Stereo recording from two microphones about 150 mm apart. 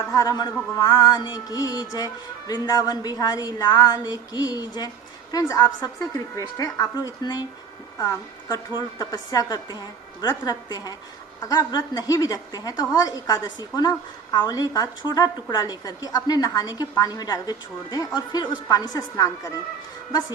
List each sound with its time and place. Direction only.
0.1 s a woman's voice: 25° left (ahead or behind)